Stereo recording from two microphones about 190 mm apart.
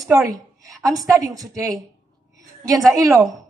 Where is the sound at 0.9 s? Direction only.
15° right (ahead or behind).